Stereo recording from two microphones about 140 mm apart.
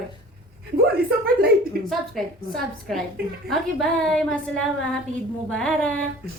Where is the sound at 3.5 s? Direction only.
5° left (ahead or behind).